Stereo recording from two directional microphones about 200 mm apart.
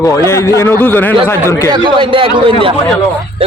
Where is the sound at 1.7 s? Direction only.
25° right (ahead or behind).